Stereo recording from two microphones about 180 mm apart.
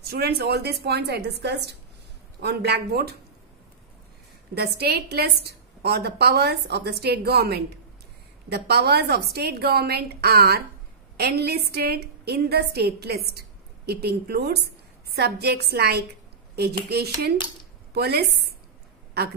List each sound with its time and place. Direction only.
0.1 s a woman's voice: 60° right (ahead or behind)
4.6 s a woman's voice: 65° right (ahead or behind)